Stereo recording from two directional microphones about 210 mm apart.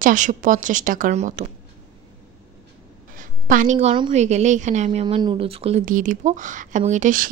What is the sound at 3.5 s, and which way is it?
A woman's voice, 35° right (ahead or behind).